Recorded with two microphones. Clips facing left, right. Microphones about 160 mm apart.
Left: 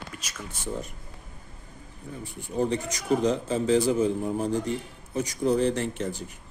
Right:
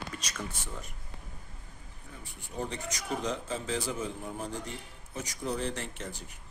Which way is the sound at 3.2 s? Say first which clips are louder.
Left 10 dB; 30° left (ahead or behind).